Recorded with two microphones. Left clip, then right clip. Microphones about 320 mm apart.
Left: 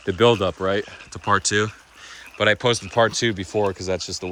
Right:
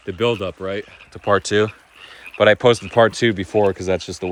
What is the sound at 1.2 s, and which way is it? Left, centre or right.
Speech, centre.